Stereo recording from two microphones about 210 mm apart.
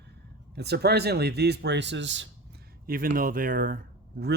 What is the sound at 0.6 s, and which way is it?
Speech, 50° right (ahead or behind).